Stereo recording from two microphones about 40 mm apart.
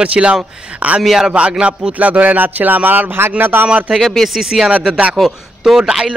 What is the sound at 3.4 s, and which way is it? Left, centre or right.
Speech, right.